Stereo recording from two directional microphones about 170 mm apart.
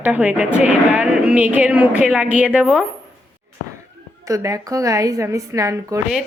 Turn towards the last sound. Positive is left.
turn(degrees=-20)  # may be behind; listen again after turning